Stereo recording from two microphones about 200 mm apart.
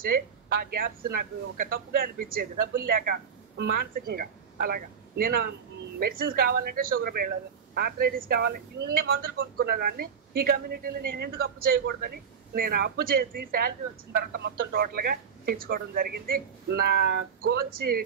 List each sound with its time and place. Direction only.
0.1 s speech: 50° right (ahead or behind)